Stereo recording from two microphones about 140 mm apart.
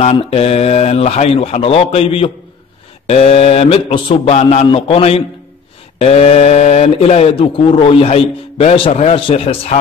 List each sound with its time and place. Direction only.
0.1 s a man's voice: 45° left (ahead or behind)